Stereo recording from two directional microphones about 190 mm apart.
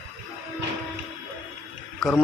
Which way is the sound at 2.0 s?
Centre (ahead or behind).